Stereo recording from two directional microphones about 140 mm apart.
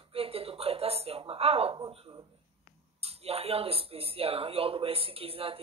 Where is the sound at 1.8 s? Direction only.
40° right (ahead or behind).